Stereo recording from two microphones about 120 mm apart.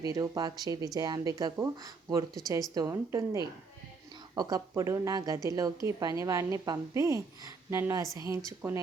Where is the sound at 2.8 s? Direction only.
30° right (ahead or behind).